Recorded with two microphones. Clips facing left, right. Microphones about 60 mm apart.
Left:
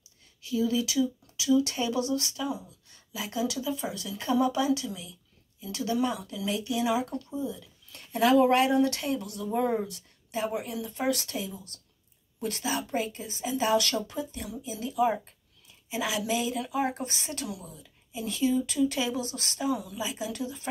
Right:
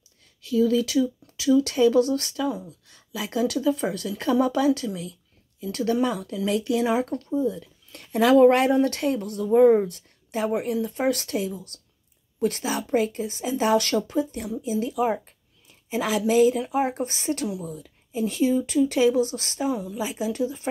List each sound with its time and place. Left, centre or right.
0.4 s a woman's voice: right